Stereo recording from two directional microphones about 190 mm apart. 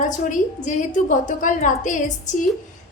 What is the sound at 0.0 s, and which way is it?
A woman's voice, 40° left (ahead or behind).